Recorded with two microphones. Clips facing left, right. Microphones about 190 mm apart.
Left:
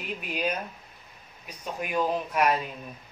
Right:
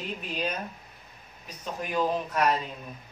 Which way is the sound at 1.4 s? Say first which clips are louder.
Left 1 dB; 10° left (ahead or behind).